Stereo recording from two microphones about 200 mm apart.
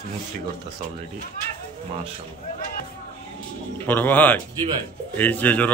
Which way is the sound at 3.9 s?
10° left (ahead or behind).